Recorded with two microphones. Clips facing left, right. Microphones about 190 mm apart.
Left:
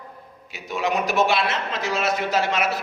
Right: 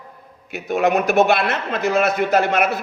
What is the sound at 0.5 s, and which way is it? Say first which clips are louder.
Speech: right 7 dB; 60° right (ahead or behind).